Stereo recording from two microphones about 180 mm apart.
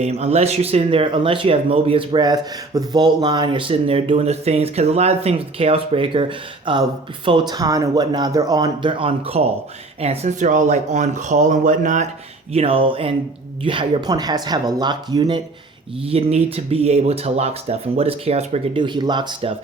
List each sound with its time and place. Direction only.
0.0 s speech: 35° right (ahead or behind)
12.5 s speech: 30° right (ahead or behind)
16.0 s speech: 35° right (ahead or behind)